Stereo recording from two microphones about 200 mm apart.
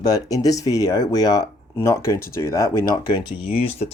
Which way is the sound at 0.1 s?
15° left (ahead or behind).